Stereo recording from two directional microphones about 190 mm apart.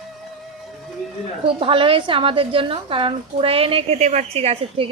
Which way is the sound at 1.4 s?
30° right (ahead or behind).